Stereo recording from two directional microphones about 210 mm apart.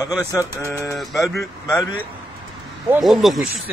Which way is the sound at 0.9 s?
Centre (ahead or behind).